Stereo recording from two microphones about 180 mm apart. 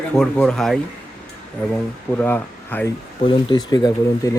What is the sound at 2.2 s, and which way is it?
Speech, 10° left (ahead or behind).